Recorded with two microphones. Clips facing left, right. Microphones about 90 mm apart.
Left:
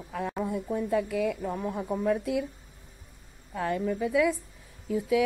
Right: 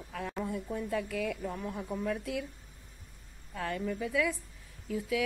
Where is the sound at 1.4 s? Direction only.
40° left (ahead or behind).